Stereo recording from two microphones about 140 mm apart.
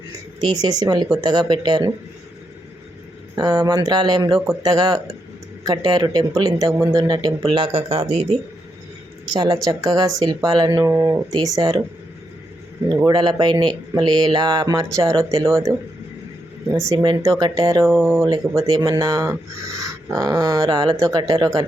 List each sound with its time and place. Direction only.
0.3 s speech: 25° right (ahead or behind)
3.3 s speech: 25° right (ahead or behind)
6.6 s speech: 20° right (ahead or behind); by 8.3 s 45° right (ahead or behind)
9.3 s speech: 25° right (ahead or behind)
13.1 s speech: 30° right (ahead or behind)
16.9 s speech: 30° right (ahead or behind)